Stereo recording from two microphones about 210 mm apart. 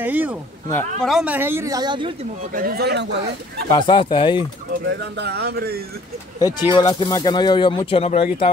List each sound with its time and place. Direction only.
0.0 s a sound: 5° right (ahead or behind)
1.0 s speech: 5° right (ahead or behind); by 2.1 s 20° right (ahead or behind)
2.5 s speech: 45° right (ahead or behind)
3.6 s speech: 25° left (ahead or behind)
4.8 s speech: 55° right (ahead or behind)
6.4 s speech: 20° left (ahead or behind)